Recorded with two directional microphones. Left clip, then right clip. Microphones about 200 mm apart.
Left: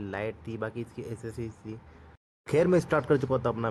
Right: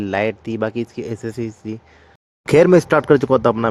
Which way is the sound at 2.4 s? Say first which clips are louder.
Right 13 dB; 45° right (ahead or behind).